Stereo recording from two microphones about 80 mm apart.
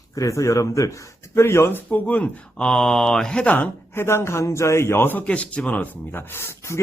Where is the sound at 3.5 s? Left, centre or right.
Left.